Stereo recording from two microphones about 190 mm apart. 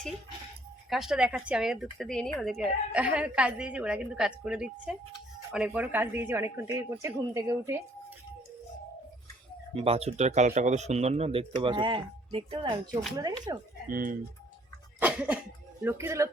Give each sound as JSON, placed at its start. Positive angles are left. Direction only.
{"t": 0.9, "sound": "speech", "side_deg": 0}
{"t": 9.7, "sound": "speech", "side_deg": -30}
{"t": 13.8, "sound": "speech", "side_deg": -45}
{"t": 15.0, "sound": "speech", "side_deg": -5}